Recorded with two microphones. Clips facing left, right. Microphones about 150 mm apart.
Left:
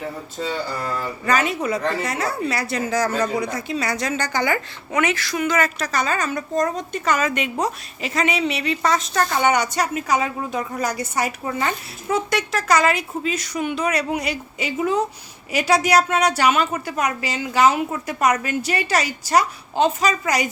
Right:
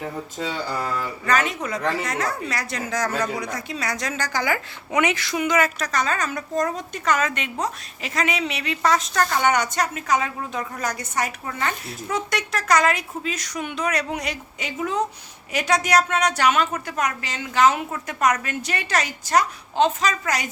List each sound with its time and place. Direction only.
1.2 s a woman's voice: 5° left (ahead or behind)
4.9 s a woman's voice: 15° right (ahead or behind)
5.6 s a woman's voice: 5° left (ahead or behind)